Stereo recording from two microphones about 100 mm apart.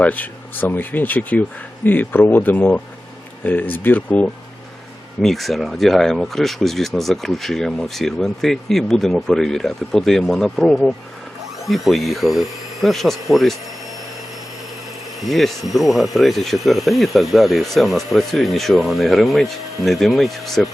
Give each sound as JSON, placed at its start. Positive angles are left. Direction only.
{"t": 0.0, "sound": "speech", "side_deg": 15}
{"t": 5.2, "sound": "speech", "side_deg": 0}
{"t": 15.2, "sound": "speech", "side_deg": 0}